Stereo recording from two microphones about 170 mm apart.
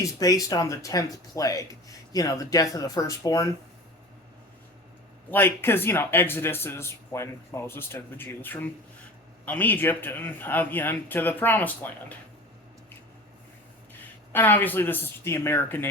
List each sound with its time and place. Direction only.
0.0 s speech: 20° left (ahead or behind)
5.3 s speech: 15° left (ahead or behind)
14.3 s speech: 10° left (ahead or behind)